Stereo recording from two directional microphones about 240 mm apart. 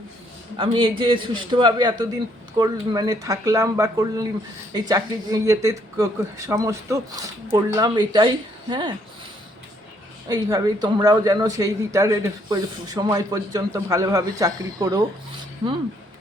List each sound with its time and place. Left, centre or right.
0.5 s a man's voice: right
10.2 s speech: centre